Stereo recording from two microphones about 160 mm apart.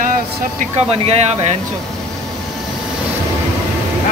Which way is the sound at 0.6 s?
40° right (ahead or behind).